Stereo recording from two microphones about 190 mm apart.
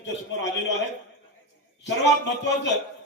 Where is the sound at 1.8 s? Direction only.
65° left (ahead or behind).